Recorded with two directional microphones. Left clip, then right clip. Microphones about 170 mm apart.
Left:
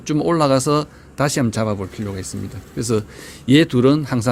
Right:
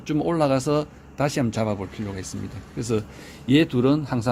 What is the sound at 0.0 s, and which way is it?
A man's voice, 35° left (ahead or behind).